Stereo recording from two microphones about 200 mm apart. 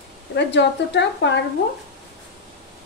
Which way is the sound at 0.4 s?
60° left (ahead or behind).